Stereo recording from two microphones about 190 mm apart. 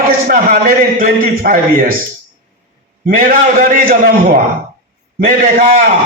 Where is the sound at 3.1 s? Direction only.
50° right (ahead or behind).